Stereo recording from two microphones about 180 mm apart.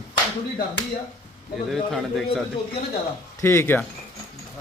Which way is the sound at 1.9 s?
Centre (ahead or behind).